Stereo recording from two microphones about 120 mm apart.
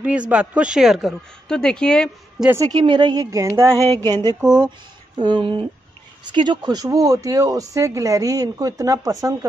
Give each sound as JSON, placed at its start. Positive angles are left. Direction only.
{"t": 0.0, "sound": "a woman's voice", "side_deg": -10}
{"t": 2.5, "sound": "a woman's voice", "side_deg": -30}
{"t": 3.3, "sound": "a woman's voice", "side_deg": -25}